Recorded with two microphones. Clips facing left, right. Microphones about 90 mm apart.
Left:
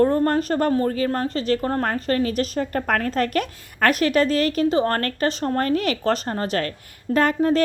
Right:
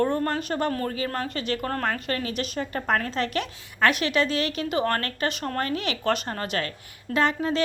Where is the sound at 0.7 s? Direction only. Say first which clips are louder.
Left 7 dB; 25° left (ahead or behind).